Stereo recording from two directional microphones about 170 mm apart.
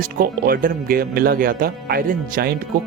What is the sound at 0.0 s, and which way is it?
Speech, 60° right (ahead or behind).